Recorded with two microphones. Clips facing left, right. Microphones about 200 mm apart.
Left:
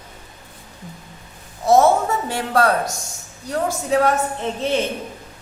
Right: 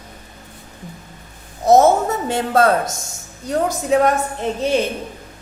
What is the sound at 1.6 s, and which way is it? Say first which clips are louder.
A woman's voice: right 2 dB; 20° right (ahead or behind).